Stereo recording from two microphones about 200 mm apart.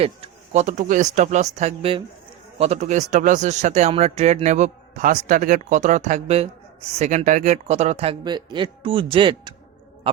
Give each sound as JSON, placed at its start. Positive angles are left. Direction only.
{"t": 0.0, "sound": "speech", "side_deg": -30}